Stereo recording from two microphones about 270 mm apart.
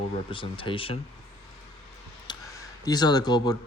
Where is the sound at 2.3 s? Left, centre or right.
Centre.